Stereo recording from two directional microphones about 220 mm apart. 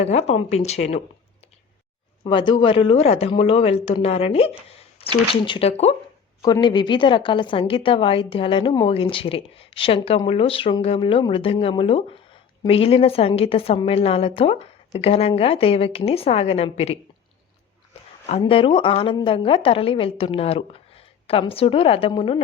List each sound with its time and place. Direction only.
0.0 s a woman's voice: 30° left (ahead or behind)
2.2 s a woman's voice: 20° left (ahead or behind)
18.3 s a woman's voice: 25° left (ahead or behind)